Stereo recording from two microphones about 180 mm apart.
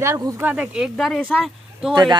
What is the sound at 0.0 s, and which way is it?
Speech, 15° right (ahead or behind).